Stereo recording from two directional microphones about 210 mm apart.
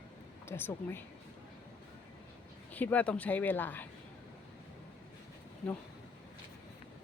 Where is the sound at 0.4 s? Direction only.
10° left (ahead or behind).